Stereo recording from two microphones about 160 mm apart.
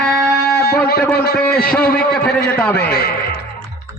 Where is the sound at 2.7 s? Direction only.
80° left.